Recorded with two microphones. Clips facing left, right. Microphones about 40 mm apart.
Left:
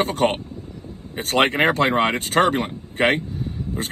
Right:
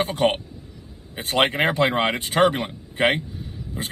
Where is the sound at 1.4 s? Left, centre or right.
Left.